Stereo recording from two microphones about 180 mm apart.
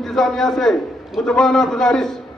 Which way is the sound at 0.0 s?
Centre (ahead or behind).